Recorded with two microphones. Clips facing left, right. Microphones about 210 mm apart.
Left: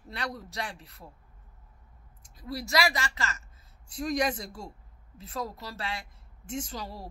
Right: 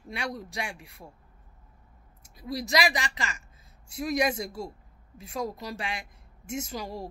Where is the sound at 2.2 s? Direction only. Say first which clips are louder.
Right 3 dB; 15° right (ahead or behind).